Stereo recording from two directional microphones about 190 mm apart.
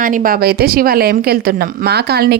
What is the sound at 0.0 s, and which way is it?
A woman's voice, 45° right (ahead or behind).